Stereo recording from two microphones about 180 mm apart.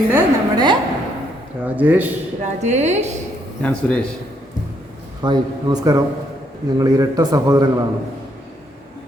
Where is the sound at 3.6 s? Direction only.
5° left (ahead or behind).